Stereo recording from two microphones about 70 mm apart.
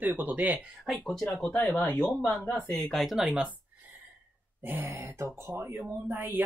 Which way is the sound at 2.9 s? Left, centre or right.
Centre.